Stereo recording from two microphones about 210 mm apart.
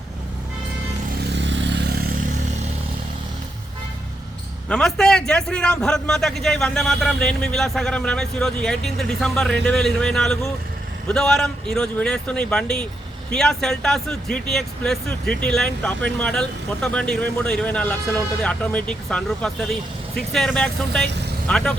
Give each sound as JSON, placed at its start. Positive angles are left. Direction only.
{"t": 1.4, "sound": "vehicle", "side_deg": -60}
{"t": 4.7, "sound": "a man's voice", "side_deg": 0}